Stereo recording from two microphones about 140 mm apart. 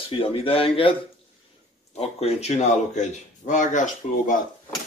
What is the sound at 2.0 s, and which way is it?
Speech, 50° left (ahead or behind).